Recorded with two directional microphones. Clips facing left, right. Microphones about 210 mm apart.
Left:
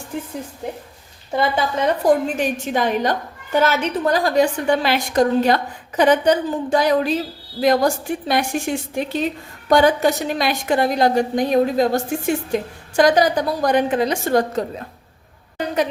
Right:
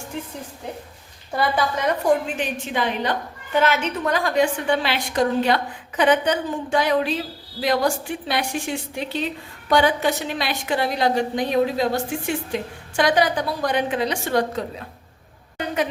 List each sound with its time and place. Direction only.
1.4 s a woman's voice: 25° left (ahead or behind)
2.0 s a woman's voice: 45° left (ahead or behind)
15.5 s a sound: 35° left (ahead or behind)